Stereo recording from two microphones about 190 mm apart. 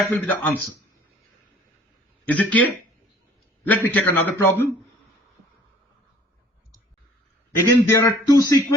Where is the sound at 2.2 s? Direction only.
5° left (ahead or behind).